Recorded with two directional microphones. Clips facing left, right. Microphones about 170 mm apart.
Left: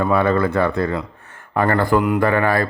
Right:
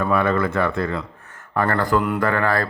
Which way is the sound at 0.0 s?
30° left (ahead or behind).